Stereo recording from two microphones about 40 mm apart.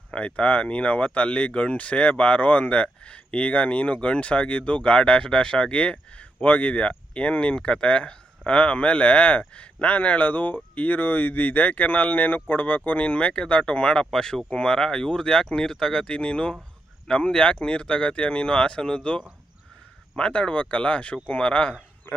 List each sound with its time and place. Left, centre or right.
0.1 s speech: left
14.1 s speech: centre; by 21.8 s left